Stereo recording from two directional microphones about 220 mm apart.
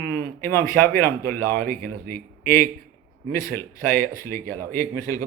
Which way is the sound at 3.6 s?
10° left (ahead or behind).